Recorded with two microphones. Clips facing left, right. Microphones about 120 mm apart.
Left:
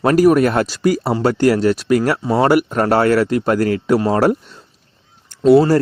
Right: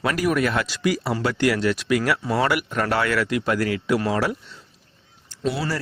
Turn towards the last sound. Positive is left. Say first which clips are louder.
# left 15 dB
turn(degrees=50)  # may be behind; listen again after turning